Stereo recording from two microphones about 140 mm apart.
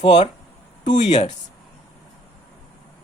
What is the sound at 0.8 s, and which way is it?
Speech, 55° left (ahead or behind).